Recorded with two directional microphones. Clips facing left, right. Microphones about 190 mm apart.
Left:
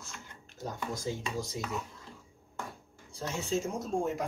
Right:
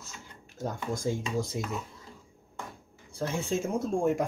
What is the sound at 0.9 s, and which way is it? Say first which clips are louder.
Speech: right 7 dB; 50° right (ahead or behind).